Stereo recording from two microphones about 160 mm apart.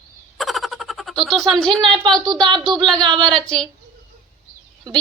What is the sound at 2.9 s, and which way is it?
Speech, 5° left (ahead or behind).